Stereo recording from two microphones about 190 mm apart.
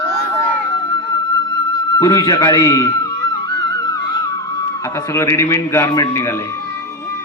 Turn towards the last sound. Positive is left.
turn(degrees=15)  # may be behind; listen again after turning